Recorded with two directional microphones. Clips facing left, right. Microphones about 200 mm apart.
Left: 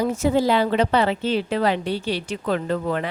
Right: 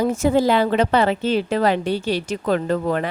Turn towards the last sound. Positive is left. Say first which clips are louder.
# right 3 dB
turn(degrees=-45)  # may be behind; listen again after turning